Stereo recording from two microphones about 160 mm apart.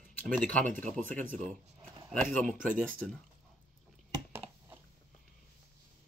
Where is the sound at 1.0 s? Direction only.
55° right (ahead or behind).